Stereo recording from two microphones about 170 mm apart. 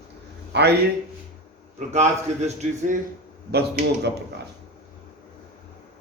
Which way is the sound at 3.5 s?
75° right (ahead or behind).